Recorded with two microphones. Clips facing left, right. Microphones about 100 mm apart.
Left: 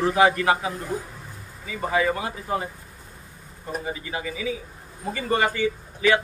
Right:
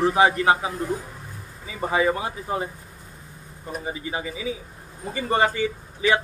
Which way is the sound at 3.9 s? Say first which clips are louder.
Right 1 dB; 25° right (ahead or behind).